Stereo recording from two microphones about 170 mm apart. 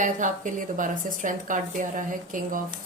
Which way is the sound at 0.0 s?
50° right (ahead or behind).